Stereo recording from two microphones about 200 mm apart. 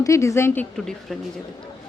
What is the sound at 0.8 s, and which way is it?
Speech, centre (ahead or behind).